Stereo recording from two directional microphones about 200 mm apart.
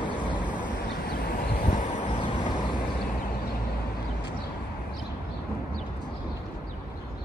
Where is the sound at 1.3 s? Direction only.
40° left (ahead or behind).